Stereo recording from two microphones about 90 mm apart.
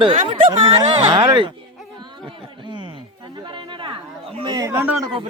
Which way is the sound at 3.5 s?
65° right (ahead or behind).